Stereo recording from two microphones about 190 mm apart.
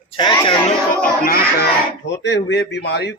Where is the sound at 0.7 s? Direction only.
50° left (ahead or behind).